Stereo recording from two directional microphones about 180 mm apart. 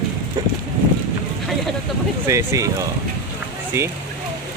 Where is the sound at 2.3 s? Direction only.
15° right (ahead or behind).